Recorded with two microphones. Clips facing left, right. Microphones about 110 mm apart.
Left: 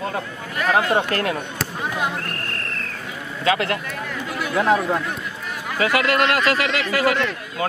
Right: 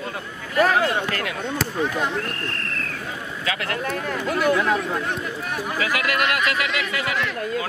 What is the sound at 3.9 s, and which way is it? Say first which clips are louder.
Speech: right 4 dB; 45° right (ahead or behind).